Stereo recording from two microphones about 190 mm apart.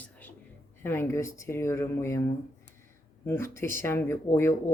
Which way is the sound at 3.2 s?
10° left (ahead or behind).